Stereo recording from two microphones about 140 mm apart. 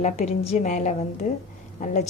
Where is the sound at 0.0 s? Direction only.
50° left (ahead or behind).